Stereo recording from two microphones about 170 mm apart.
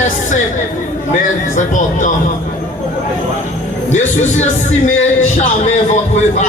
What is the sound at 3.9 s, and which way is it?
A man's voice, 45° left (ahead or behind).